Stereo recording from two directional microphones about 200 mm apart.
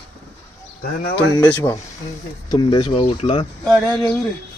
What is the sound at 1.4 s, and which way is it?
Speech, 10° left (ahead or behind).